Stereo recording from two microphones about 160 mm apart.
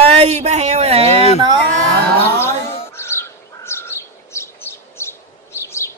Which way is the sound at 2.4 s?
15° left (ahead or behind).